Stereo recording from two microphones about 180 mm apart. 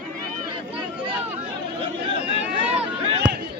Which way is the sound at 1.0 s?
30° right (ahead or behind).